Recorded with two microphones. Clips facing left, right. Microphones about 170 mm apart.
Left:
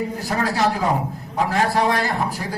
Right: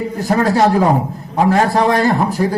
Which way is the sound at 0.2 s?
45° right (ahead or behind).